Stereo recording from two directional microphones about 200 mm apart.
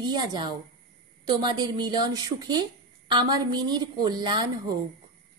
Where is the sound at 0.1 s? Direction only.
20° right (ahead or behind).